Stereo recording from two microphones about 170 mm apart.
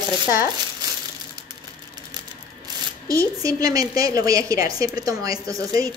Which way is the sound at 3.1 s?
20° right (ahead or behind).